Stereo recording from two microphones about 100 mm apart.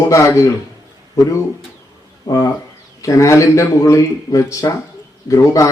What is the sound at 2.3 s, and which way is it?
Speech, 40° left (ahead or behind).